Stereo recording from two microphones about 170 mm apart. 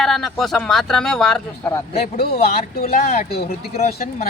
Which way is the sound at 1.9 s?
35° left (ahead or behind).